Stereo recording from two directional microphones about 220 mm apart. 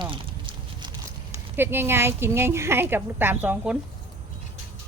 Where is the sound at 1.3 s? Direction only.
10° right (ahead or behind).